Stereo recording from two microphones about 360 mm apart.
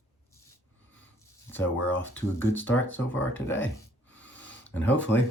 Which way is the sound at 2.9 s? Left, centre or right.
Centre.